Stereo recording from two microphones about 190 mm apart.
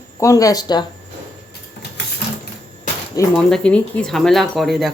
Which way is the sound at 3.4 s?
5° left (ahead or behind).